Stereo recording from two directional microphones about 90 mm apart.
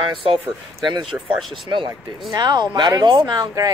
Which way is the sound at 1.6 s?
60° right (ahead or behind).